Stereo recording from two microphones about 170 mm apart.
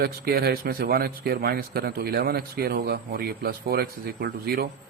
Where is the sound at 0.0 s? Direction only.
65° right (ahead or behind).